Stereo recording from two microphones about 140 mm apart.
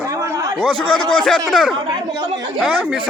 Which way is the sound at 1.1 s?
5° left (ahead or behind).